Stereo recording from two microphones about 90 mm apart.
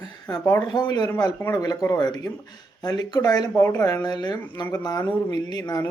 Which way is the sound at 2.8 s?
50° left (ahead or behind).